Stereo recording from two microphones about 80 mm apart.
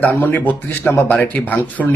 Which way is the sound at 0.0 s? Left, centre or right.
Left.